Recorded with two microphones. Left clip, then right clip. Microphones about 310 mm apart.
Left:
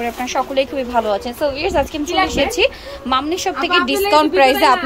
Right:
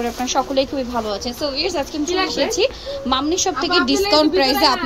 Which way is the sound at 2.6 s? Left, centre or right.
Centre.